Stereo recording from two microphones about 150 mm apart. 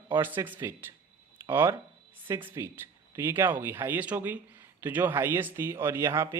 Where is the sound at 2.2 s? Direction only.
15° right (ahead or behind).